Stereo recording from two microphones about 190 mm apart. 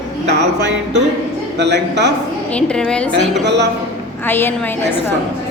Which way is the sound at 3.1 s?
65° right (ahead or behind).